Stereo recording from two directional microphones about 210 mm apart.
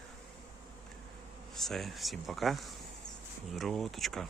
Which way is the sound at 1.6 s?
Centre (ahead or behind).